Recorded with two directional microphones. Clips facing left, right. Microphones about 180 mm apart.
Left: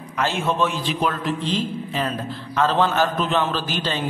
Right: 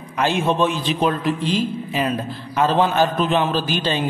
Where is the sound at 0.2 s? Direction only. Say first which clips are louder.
Right 3 dB; 15° right (ahead or behind).